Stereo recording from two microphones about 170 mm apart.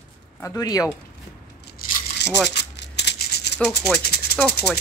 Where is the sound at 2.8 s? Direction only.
90° left.